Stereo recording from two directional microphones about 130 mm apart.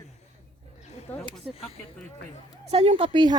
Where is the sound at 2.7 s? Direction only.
45° right (ahead or behind).